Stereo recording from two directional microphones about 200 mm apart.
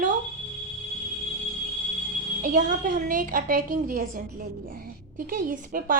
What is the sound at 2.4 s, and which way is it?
A woman's voice, 40° right (ahead or behind).